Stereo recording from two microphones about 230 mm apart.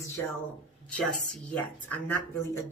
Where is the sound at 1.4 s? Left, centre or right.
Centre.